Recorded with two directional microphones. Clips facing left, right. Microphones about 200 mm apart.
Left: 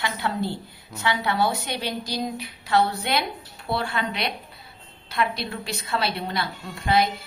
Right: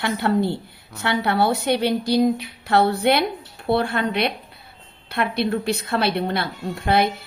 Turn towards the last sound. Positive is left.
turn(degrees=-60)  # may be behind; listen again after turning